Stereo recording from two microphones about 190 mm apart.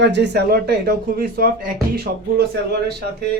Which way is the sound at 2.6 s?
60° right (ahead or behind).